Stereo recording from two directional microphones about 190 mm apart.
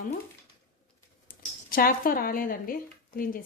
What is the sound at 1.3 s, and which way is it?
A woman's voice, 50° left (ahead or behind).